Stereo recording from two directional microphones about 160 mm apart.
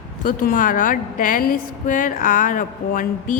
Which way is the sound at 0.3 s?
60° left (ahead or behind).